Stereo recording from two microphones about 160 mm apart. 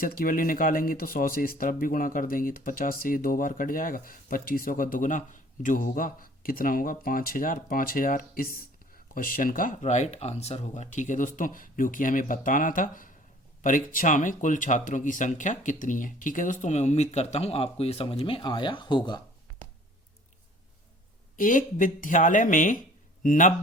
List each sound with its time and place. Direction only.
0.0 s speech: 60° left (ahead or behind); by 19.2 s 30° left (ahead or behind)
21.3 s speech: 55° left (ahead or behind)